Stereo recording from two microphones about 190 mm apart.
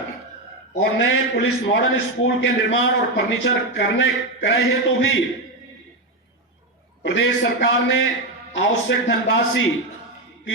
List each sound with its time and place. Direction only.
0.8 s a man's voice: 75° left (ahead or behind)
3.3 s a man's voice: 70° left (ahead or behind)
7.0 s a man's voice: 70° left (ahead or behind)